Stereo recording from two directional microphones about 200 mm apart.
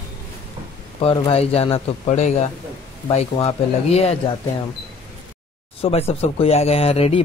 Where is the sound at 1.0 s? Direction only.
30° left (ahead or behind).